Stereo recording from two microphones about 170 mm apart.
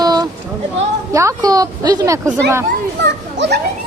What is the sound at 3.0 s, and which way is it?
Speech, 90° right.